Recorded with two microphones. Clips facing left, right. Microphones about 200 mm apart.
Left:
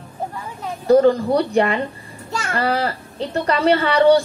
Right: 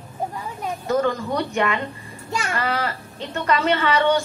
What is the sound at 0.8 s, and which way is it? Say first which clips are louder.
A woman's voice: left 9 dB; 35° left (ahead or behind).